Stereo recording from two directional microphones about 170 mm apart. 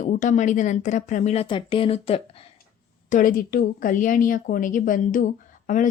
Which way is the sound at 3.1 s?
55° left (ahead or behind).